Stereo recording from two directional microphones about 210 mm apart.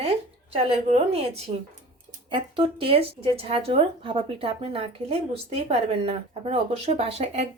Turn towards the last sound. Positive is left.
turn(degrees=-30)  # may be behind; listen again after turning